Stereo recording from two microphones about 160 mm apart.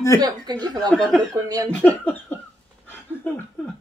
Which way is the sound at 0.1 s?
15° left (ahead or behind).